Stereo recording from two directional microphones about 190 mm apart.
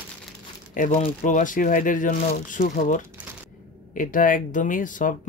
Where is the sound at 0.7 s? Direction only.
40° left (ahead or behind).